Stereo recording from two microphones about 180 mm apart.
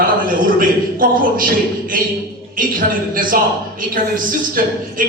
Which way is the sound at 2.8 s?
50° right (ahead or behind).